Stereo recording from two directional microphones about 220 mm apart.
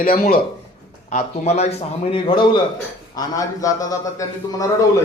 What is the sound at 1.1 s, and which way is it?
A man's voice, 30° left (ahead or behind).